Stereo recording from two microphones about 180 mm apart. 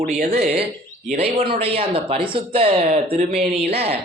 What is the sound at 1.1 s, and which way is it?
A man's voice, 35° right (ahead or behind).